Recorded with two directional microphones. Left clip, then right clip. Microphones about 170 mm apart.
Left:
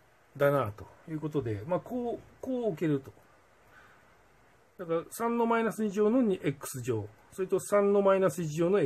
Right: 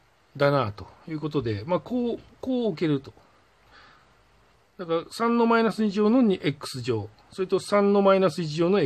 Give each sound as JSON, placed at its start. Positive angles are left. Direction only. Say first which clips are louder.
{"t": 0.4, "sound": "speech", "louder": "right 4 dB", "side_deg": -25}
{"t": 4.7, "sound": "speech", "louder": "right 5 dB", "side_deg": -25}